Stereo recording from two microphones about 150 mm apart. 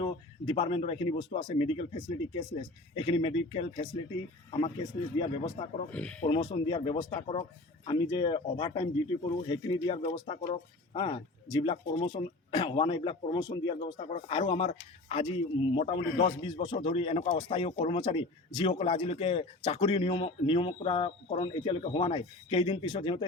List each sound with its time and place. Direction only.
0.0 s speech: 35° left (ahead or behind)
5.2 s speech: 30° left (ahead or behind)
5.9 s speech: 10° left (ahead or behind)
6.2 s speech: 35° left (ahead or behind)